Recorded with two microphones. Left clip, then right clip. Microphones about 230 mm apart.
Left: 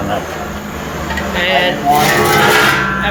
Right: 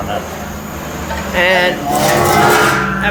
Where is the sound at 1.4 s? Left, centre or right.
Centre.